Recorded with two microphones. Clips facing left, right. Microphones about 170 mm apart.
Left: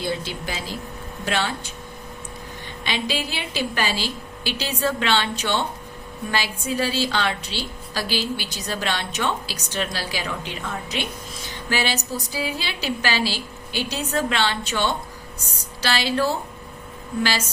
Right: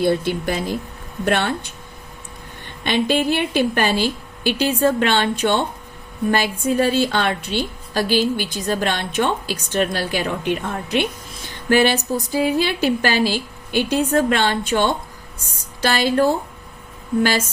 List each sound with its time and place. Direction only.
0.0 s a woman's voice: 55° right (ahead or behind)
2.8 s a woman's voice: 55° right (ahead or behind)